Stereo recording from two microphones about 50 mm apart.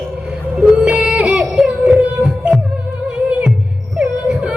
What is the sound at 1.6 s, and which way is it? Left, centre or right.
Music, right.